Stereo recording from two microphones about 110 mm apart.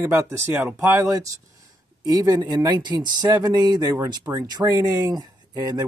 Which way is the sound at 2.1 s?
35° right (ahead or behind).